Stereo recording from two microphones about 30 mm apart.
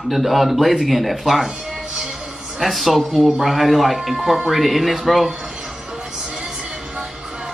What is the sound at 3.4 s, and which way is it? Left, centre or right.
Speech, centre.